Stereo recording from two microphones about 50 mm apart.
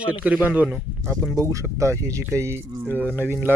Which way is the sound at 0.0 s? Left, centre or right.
Right.